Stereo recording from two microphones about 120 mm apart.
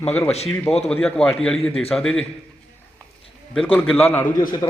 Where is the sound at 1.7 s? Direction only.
55° left (ahead or behind).